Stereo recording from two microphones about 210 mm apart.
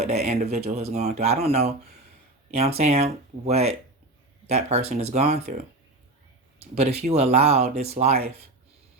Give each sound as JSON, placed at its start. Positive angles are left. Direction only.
{"t": 0.0, "sound": "speech", "side_deg": -30}